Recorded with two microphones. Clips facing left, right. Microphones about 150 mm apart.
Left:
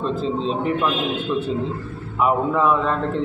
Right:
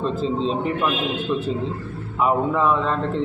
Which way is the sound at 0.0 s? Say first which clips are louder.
Even; centre (ahead or behind).